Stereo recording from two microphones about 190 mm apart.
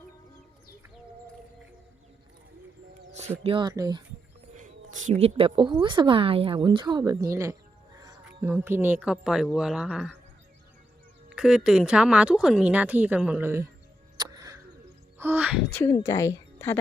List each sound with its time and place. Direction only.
3.1 s speech: 35° right (ahead or behind)
4.5 s speech: 40° right (ahead or behind); by 7.3 s 20° right (ahead or behind)
8.4 s speech: 10° right (ahead or behind)
11.3 s speech: 5° right (ahead or behind)
14.2 s a sound: 20° right (ahead or behind)
15.2 s speech: 10° right (ahead or behind)
16.0 s a woman's voice: 20° left (ahead or behind)